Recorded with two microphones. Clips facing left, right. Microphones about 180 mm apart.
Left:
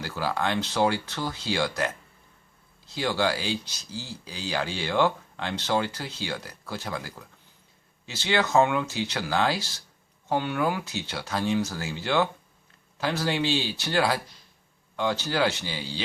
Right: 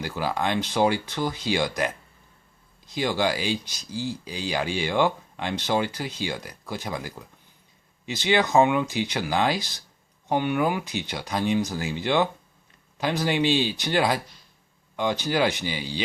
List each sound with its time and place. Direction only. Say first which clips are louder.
0.0 s speech: right 2 dB; 15° right (ahead or behind)